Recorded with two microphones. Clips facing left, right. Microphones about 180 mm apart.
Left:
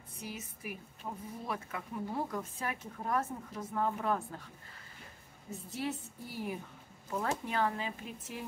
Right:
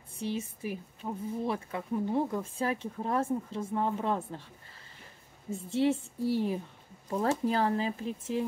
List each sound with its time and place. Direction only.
0.2 s speech: 30° right (ahead or behind)
5.5 s speech: 25° right (ahead or behind)